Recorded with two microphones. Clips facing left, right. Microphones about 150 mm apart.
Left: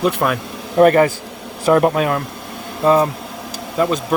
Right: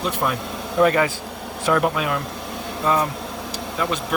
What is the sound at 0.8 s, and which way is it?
Speech, 50° left (ahead or behind).